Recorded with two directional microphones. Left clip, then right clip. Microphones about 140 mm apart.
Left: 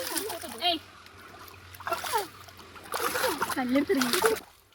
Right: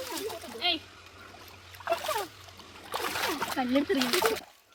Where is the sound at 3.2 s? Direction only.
10° left (ahead or behind).